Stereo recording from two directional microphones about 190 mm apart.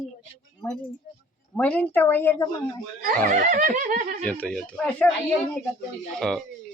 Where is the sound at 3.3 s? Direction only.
40° right (ahead or behind).